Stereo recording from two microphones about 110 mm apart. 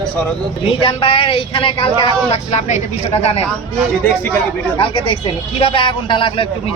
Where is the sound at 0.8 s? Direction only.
50° left (ahead or behind).